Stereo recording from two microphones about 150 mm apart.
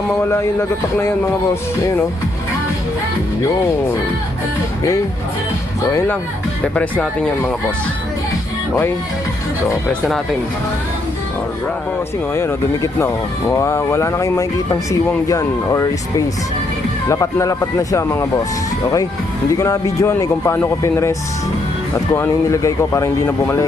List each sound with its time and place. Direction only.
0.2 s a man's voice: 15° left (ahead or behind)
12.3 s speech: 20° left (ahead or behind)
19.5 s speech: 25° left (ahead or behind)